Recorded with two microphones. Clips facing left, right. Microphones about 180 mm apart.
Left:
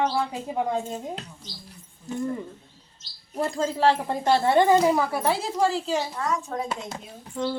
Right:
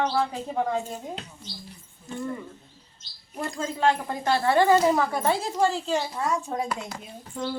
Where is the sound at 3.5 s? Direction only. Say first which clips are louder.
Left 2 dB; 35° left (ahead or behind); by 6.2 s centre (ahead or behind).